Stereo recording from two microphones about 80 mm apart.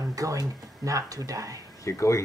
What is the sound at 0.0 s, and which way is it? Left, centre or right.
Speech, right.